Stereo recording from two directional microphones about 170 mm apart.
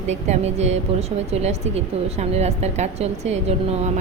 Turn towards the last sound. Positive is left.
turn(degrees=-40)  # may be behind; listen again after turning